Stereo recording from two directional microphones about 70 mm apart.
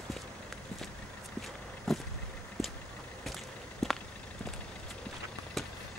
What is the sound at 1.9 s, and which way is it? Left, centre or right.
Vehicle, centre.